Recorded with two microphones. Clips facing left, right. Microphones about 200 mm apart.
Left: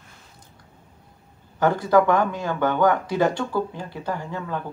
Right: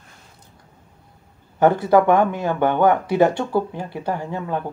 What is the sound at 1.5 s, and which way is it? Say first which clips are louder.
Speech: right 3 dB; 25° right (ahead or behind).